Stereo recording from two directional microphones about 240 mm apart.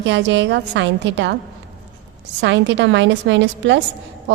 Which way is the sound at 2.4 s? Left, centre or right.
Right.